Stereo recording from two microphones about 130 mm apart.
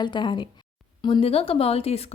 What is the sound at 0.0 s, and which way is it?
A woman's voice, 35° left (ahead or behind).